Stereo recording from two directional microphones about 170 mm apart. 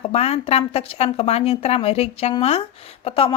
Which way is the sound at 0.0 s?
35° left (ahead or behind).